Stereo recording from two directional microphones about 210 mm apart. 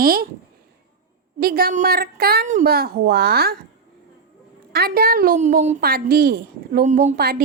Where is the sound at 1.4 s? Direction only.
45° right (ahead or behind).